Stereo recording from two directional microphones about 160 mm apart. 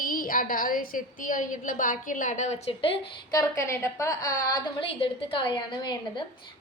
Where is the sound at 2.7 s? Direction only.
35° left (ahead or behind).